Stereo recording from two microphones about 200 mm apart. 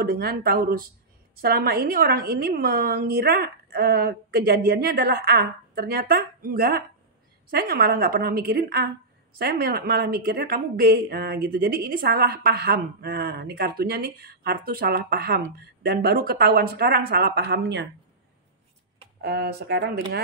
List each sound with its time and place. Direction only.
0.0 s speech: 50° right (ahead or behind)
19.2 s speech: 50° right (ahead or behind)